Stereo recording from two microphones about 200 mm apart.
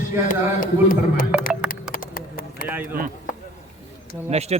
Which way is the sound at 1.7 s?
45° left (ahead or behind).